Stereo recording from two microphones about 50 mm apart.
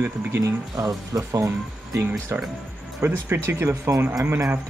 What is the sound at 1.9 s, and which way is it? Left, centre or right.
Speech, right.